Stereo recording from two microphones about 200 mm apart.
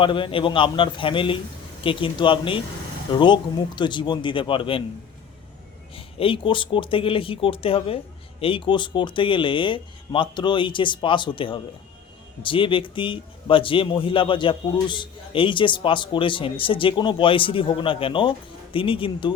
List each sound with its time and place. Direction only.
0.0 s a man's voice: 25° left (ahead or behind)
5.9 s a man's voice: 25° left (ahead or behind)